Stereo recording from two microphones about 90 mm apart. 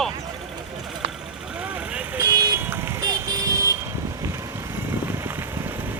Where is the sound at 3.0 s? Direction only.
45° right (ahead or behind).